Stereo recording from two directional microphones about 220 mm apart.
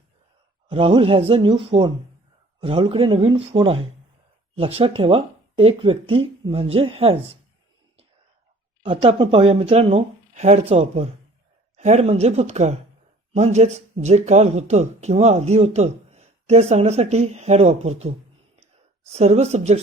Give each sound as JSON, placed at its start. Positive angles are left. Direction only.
{"t": 0.7, "sound": "speech", "side_deg": -25}
{"t": 8.8, "sound": "speech", "side_deg": -25}
{"t": 19.1, "sound": "speech", "side_deg": -30}